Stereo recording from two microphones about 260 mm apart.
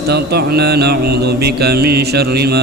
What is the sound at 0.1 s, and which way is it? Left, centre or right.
Mantra, right.